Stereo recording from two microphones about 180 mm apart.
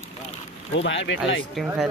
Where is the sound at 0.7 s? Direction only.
90° left.